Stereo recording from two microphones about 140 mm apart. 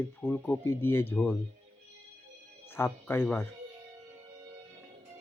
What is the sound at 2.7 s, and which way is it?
Speech, 15° left (ahead or behind).